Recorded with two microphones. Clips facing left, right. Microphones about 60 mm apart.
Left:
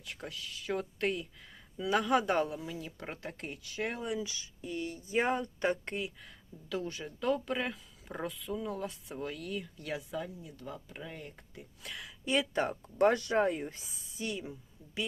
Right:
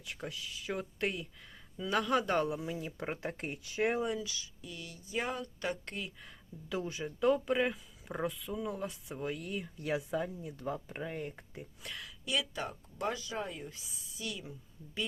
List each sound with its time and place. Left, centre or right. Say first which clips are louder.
0.0 s speech: right 1 dB; centre
2.6 s speech: right 3 dB; right
4.2 s speech: left 3 dB; left
6.7 s speech: even; centre
11.8 s speech: left 2 dB; centre
12.0 s speech: left 5 dB; left